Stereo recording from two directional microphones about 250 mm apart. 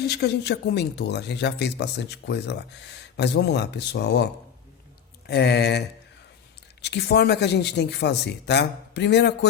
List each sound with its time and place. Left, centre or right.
0.0 s speech: left
6.8 s speech: left